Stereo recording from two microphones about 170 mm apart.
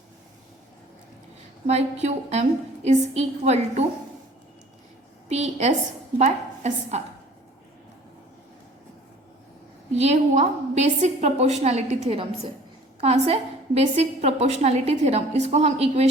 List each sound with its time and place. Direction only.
1.6 s a woman's voice: 40° right (ahead or behind)
5.3 s a woman's voice: 40° right (ahead or behind)
9.9 s a woman's voice: 40° right (ahead or behind)